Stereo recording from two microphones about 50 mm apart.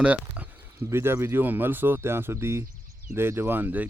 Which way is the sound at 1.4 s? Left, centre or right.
Right.